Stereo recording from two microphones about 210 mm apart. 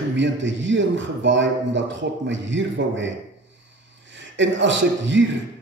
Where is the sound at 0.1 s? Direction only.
60° right (ahead or behind).